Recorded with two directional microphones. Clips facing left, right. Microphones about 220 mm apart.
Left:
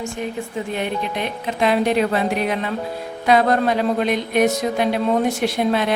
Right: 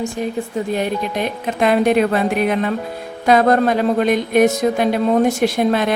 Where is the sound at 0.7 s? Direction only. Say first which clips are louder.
Right 3 dB; 40° right (ahead or behind).